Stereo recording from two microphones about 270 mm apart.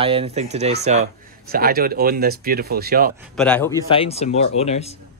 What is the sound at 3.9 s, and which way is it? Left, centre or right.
Speech, left.